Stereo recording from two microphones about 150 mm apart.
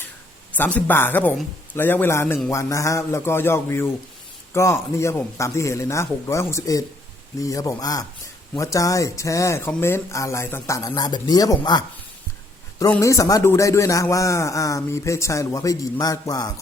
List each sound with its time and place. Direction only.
0.5 s a man's voice: 10° left (ahead or behind); by 11.9 s 30° left (ahead or behind)
13.0 s speech: 20° left (ahead or behind)